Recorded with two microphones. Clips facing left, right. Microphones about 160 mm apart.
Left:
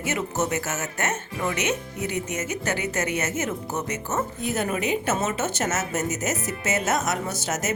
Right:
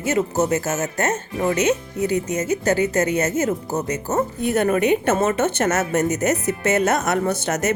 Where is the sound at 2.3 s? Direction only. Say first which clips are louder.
Right 8 dB; 35° right (ahead or behind).